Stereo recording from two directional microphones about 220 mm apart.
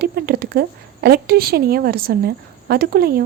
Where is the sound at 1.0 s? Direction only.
45° right (ahead or behind).